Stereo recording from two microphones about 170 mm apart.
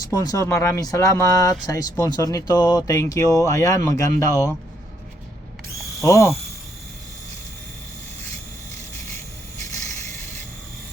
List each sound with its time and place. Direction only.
0.1 s speech: 20° left (ahead or behind)
6.0 s speech: 15° left (ahead or behind)